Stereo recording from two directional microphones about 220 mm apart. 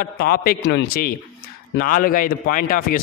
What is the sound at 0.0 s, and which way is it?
A man's voice, 45° left (ahead or behind).